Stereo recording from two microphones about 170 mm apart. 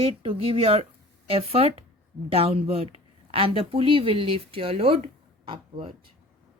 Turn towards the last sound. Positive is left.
turn(degrees=-30)  # may be behind; listen again after turning